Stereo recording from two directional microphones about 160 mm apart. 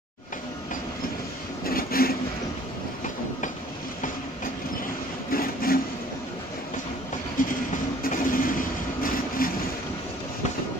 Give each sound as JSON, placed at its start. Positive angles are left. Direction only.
{"t": 1.6, "sound": "vehicle", "side_deg": 65}
{"t": 5.3, "sound": "a sound", "side_deg": 65}
{"t": 7.4, "sound": "vehicle", "side_deg": 60}